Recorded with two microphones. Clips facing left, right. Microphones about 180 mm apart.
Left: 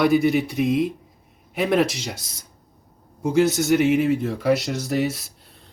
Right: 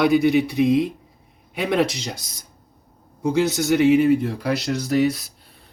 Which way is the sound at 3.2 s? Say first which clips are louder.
Left 1 dB; centre (ahead or behind).